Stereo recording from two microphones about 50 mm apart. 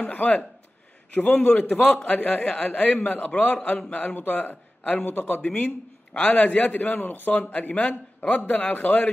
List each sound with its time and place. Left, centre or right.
0.0 s a man's voice: left
1.5 s a man's voice: left
2.4 s a man's voice: centre
2.7 s a man's voice: left